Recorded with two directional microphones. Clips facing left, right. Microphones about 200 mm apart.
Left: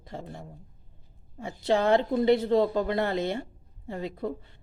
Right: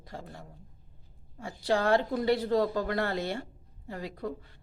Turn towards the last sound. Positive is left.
turn(degrees=25)  # may be behind; listen again after turning